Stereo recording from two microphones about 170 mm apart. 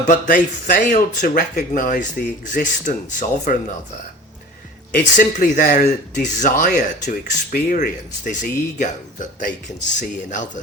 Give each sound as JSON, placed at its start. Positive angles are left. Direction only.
{"t": 0.1, "sound": "speech", "side_deg": 50}
{"t": 5.1, "sound": "speech", "side_deg": 50}